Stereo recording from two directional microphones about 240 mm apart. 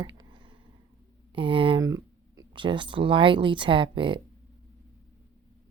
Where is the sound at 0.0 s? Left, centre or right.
Centre.